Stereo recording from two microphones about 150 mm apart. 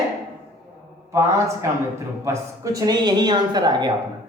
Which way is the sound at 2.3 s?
20° right (ahead or behind).